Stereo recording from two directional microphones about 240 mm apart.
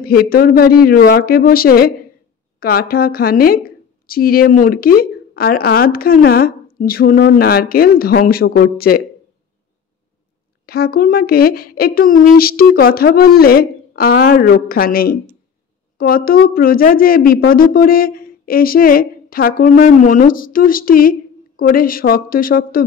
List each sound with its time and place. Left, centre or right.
0.0 s speech: left
10.6 s speech: left